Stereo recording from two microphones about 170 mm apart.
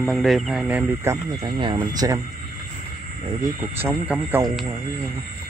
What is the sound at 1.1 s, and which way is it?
Speech, 25° right (ahead or behind).